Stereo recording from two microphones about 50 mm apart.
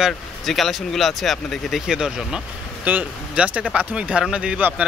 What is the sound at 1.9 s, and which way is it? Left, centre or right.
Speech, centre.